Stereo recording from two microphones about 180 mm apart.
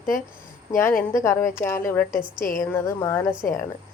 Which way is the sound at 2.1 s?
50° left (ahead or behind).